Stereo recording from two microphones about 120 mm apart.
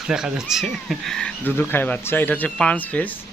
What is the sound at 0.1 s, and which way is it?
A man's voice, 5° right (ahead or behind).